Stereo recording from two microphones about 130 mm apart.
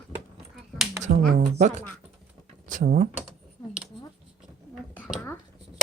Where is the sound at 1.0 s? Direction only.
65° right (ahead or behind).